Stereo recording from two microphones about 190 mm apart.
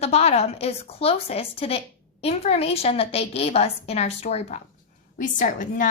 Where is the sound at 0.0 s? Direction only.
35° left (ahead or behind).